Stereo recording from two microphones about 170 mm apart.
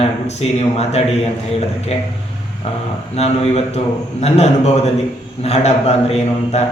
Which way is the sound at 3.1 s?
40° left (ahead or behind).